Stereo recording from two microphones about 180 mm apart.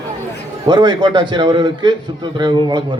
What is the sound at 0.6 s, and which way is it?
A man's voice, 25° right (ahead or behind).